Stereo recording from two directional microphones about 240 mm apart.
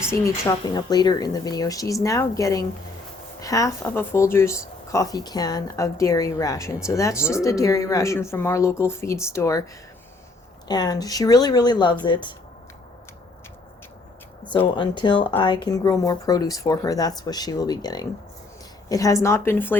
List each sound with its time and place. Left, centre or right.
0.1 s speech: centre
10.7 s speech: centre
14.8 s speech: centre